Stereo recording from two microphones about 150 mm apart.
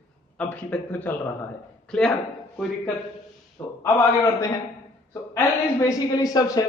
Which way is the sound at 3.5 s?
15° left (ahead or behind).